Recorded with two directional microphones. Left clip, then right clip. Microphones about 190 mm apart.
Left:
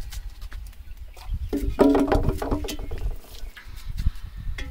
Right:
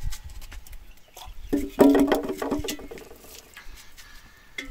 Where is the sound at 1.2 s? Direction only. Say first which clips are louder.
Right 2 dB; 40° right (ahead or behind).